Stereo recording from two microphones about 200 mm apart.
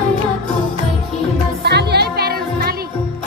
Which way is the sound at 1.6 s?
55° right (ahead or behind).